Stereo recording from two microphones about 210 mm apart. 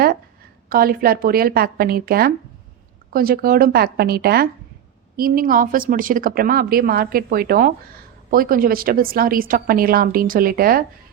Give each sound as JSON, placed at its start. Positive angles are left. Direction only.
{"t": 0.7, "sound": "a woman's voice", "side_deg": -45}